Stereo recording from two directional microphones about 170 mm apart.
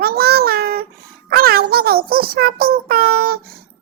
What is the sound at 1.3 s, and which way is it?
Speech, 65° right (ahead or behind).